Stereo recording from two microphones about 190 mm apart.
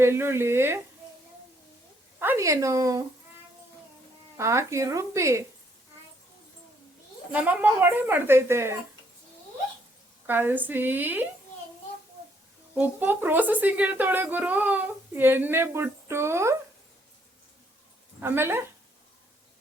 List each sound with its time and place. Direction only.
0.0 s speech: 15° right (ahead or behind)
2.1 s speech: 10° right (ahead or behind)
4.4 s speech: 15° right (ahead or behind)
7.3 s speech: 10° right (ahead or behind)
10.2 s speech: 10° right (ahead or behind)
12.7 s speech: 10° right (ahead or behind)
18.2 s speech: 10° right (ahead or behind)